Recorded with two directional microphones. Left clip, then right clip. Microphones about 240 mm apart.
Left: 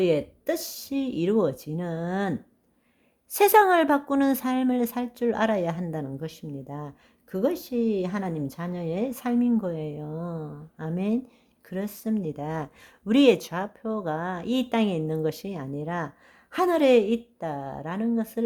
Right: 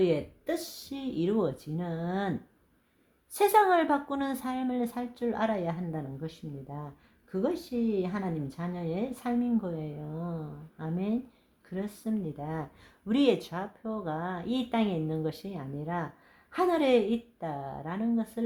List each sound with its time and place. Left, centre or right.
0.0 s speech: left
3.3 s speech: left